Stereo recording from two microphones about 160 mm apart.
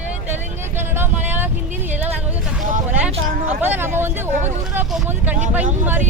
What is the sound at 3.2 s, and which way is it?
Speech, 65° right (ahead or behind).